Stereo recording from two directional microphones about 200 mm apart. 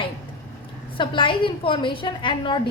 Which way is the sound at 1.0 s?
25° left (ahead or behind).